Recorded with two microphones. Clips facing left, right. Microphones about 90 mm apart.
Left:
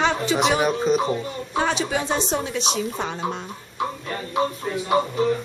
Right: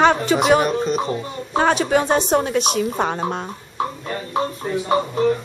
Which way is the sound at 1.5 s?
50° right (ahead or behind).